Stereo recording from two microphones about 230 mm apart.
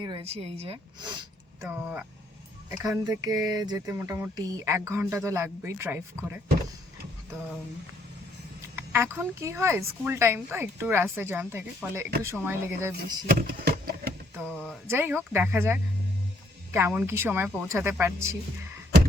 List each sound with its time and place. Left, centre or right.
0.0 s speech: right
1.6 s speech: centre
8.7 s speech: centre
13.5 s a sound: right
14.5 s speech: centre
14.8 s speech: centre